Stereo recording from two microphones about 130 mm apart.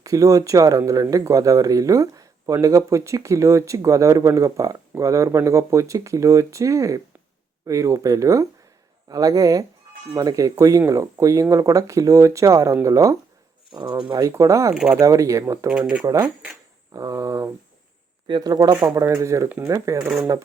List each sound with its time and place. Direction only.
0.0 s speech: 25° right (ahead or behind)
14.7 s speech: 5° right (ahead or behind)
14.9 s speech: 25° right (ahead or behind)
15.7 s speech: 10° right (ahead or behind)
16.9 s speech: 25° right (ahead or behind)